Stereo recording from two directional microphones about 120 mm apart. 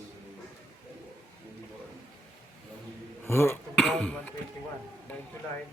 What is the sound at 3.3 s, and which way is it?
Throat clearing, 20° left (ahead or behind).